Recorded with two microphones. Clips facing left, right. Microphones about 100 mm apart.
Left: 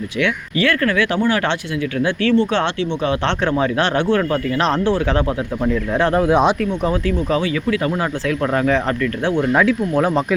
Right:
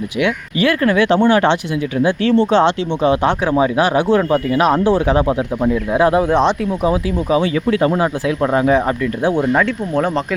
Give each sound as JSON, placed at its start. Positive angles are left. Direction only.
{"t": 0.2, "sound": "speech", "side_deg": -15}
{"t": 6.2, "sound": "speech", "side_deg": 10}
{"t": 6.8, "sound": "speech", "side_deg": -10}
{"t": 7.7, "sound": "speech", "side_deg": -30}
{"t": 8.4, "sound": "speech", "side_deg": -20}
{"t": 9.5, "sound": "speech", "side_deg": 5}